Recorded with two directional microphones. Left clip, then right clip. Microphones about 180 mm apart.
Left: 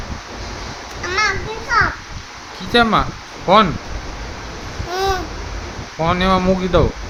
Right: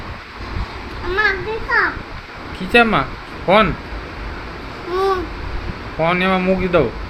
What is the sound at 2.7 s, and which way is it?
Speech, 15° left (ahead or behind).